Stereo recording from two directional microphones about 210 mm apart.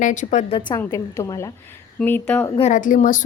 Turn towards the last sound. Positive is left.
turn(degrees=40)  # may be behind; listen again after turning